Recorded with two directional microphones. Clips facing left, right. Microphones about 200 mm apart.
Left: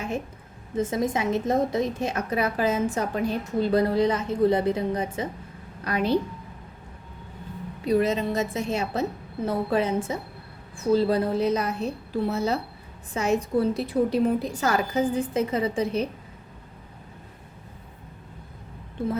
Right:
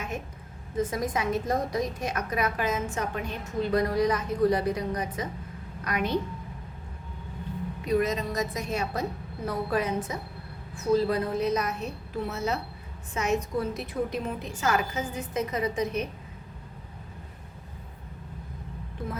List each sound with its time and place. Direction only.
0.8 s a woman's voice: 25° left (ahead or behind)
7.9 s a woman's voice: 30° left (ahead or behind)